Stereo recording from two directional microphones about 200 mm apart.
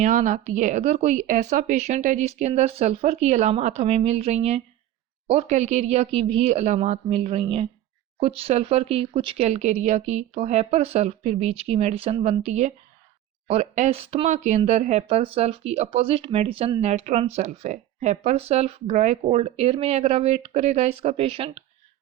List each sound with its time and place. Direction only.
0.0 s speech: 40° right (ahead or behind)